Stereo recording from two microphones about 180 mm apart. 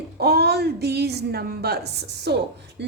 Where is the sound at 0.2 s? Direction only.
65° right (ahead or behind).